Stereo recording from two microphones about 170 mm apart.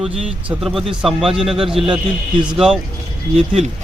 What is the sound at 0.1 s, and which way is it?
Speech, 35° right (ahead or behind).